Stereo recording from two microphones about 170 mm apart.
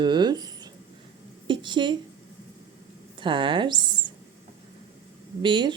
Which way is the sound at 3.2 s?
30° right (ahead or behind).